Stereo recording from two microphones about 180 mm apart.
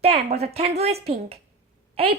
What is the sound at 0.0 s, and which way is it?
Speech, 35° right (ahead or behind).